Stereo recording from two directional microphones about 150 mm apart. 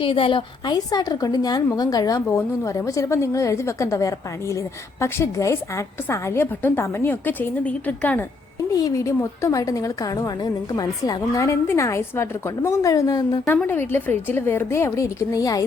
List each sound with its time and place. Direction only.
0.0 s a woman's voice: 35° left (ahead or behind); by 8.2 s 10° left (ahead or behind)
8.7 s a woman's voice: 20° left (ahead or behind)
13.4 s a woman's voice: centre (ahead or behind)
13.7 s a woman's voice: 15° left (ahead or behind)